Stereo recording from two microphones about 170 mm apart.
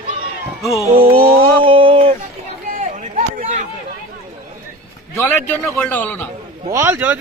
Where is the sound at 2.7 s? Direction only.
50° right (ahead or behind).